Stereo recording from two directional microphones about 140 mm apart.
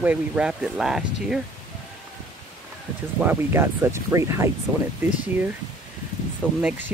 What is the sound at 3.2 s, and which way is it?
Speech, 15° right (ahead or behind).